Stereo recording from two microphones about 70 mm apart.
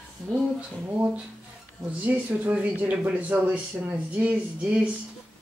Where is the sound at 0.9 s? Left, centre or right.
Centre.